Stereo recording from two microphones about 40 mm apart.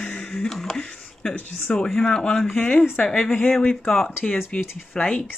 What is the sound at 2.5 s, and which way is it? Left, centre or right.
Speech, left.